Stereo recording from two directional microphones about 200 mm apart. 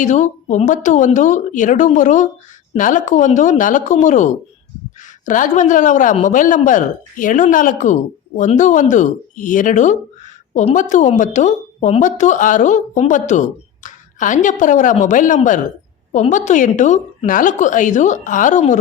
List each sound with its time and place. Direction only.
0.0 s a woman's voice: 35° left (ahead or behind)